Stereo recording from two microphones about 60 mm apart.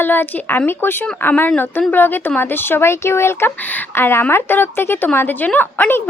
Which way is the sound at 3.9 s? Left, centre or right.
Left.